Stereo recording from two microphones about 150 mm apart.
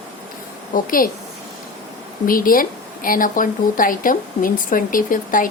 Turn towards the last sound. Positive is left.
turn(degrees=65)  # may be behind; listen again after turning